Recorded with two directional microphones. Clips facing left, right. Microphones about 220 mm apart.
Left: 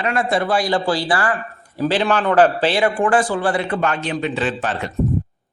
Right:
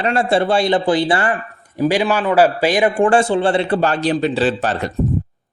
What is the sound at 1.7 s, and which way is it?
A man's voice, 15° right (ahead or behind).